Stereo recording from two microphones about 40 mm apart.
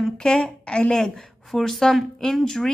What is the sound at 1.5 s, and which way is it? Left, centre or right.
A woman's voice, centre.